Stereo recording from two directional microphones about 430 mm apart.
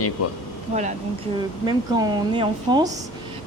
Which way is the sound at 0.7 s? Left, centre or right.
Centre.